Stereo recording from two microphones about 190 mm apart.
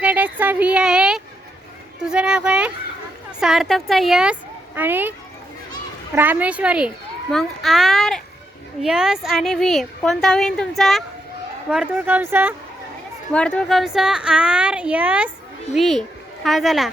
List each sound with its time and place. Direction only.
0.0 s a sound: 10° right (ahead or behind)
2.0 s a woman's voice: 5° right (ahead or behind)
6.1 s a woman's voice: 10° right (ahead or behind)
13.3 s a woman's voice: 5° left (ahead or behind)